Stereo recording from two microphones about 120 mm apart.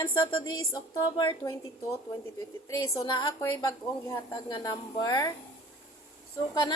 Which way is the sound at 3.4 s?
30° left (ahead or behind).